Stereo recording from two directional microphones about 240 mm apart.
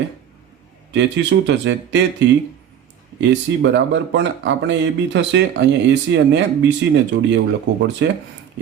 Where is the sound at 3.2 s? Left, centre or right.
Right.